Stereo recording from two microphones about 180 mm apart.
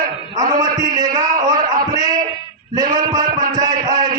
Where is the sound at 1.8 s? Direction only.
20° right (ahead or behind).